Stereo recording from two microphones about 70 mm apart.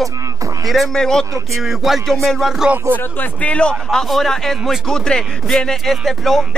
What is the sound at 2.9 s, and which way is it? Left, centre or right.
A man's voice, left.